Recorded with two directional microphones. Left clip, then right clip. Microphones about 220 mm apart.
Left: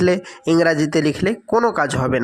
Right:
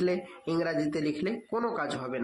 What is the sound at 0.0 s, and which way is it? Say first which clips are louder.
A man's voice: left 12 dB; 35° left (ahead or behind).